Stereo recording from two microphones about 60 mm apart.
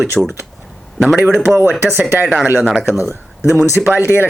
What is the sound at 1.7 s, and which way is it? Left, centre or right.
Speech, right.